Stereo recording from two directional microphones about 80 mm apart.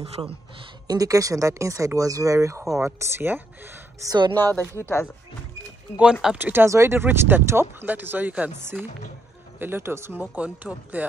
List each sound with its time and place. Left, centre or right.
0.2 s speech: right
0.8 s speech: right
2.8 s speech: right
4.4 s speech: left
6.3 s speech: right
8.5 s speech: right
10.3 s speech: centre